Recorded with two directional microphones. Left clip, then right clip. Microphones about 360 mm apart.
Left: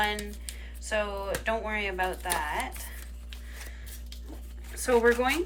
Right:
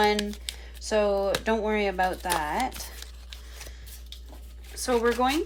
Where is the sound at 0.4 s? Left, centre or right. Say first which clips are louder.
Right 6 dB; centre.